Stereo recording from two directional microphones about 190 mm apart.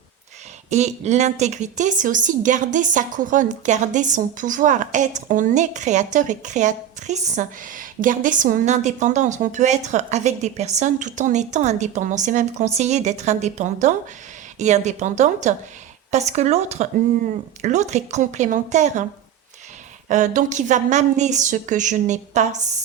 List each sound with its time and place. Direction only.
0.7 s speech: 35° right (ahead or behind)
20.1 s speech: 40° right (ahead or behind)